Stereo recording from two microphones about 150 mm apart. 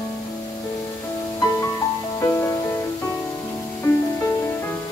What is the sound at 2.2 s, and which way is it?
Music, 20° left (ahead or behind).